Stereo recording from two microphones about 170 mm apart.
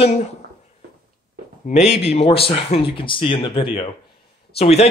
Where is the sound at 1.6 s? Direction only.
45° left (ahead or behind).